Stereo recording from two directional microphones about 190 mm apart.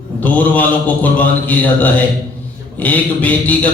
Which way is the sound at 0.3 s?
10° left (ahead or behind).